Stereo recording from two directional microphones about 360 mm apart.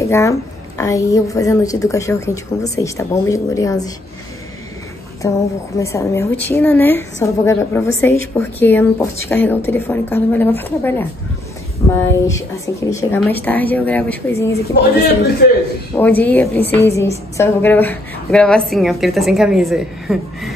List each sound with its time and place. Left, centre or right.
0.0 s a woman's voice: centre
5.2 s a woman's voice: centre
12.6 s a woman's voice: centre
14.7 s a man's voice: left
15.9 s a woman's voice: centre